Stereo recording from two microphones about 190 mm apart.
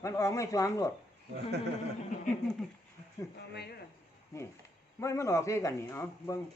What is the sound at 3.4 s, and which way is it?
Speech, 60° left (ahead or behind).